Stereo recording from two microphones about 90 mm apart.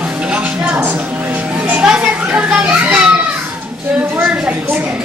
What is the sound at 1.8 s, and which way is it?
Children playing, 10° right (ahead or behind).